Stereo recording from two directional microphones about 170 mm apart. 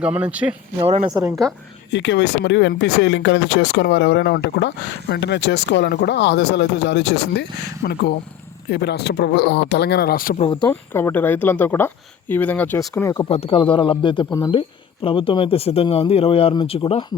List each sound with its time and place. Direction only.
0.0 s speech: 10° right (ahead or behind)
0.8 s speech: 35° right (ahead or behind)
1.1 s speech: 20° right (ahead or behind)
1.9 s speech: 90° left
7.8 s speech: 60° left (ahead or behind)
8.7 s speech: 75° left (ahead or behind); by 10.3 s 60° left (ahead or behind)
10.3 s a man's voice: 40° left (ahead or behind)
10.7 s speech: 15° left (ahead or behind)
13.1 s a man's voice: 35° left (ahead or behind)